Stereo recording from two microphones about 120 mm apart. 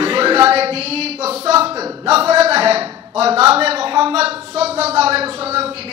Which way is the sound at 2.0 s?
60° right (ahead or behind).